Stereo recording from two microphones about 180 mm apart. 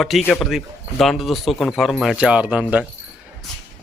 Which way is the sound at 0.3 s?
Centre (ahead or behind).